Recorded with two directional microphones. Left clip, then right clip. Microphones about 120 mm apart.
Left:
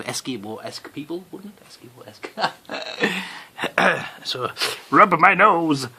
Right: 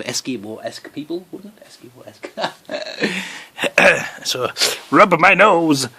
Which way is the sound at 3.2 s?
35° right (ahead or behind).